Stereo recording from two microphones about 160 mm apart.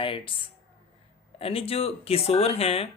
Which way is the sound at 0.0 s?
35° left (ahead or behind).